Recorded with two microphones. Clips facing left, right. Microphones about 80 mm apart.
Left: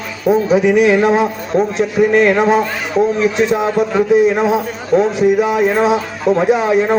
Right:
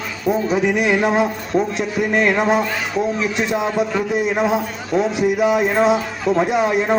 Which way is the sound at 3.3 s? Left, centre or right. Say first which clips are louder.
Left 5 dB; centre.